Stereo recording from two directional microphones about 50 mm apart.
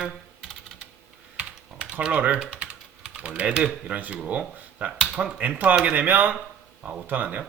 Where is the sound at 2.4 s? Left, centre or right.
Right.